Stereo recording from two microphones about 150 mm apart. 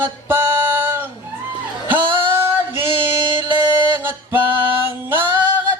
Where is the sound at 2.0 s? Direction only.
30° right (ahead or behind).